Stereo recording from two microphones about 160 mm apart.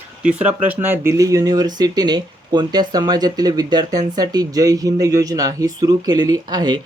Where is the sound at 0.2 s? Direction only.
10° right (ahead or behind).